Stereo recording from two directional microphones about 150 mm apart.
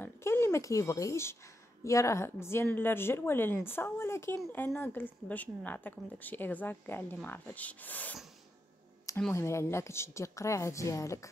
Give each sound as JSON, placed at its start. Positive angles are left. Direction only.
{"t": 0.0, "sound": "a sound", "side_deg": 15}
{"t": 1.9, "sound": "a woman's voice", "side_deg": 20}
{"t": 9.3, "sound": "a woman's voice", "side_deg": 20}